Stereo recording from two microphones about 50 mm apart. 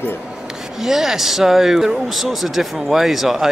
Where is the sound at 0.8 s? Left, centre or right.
Centre.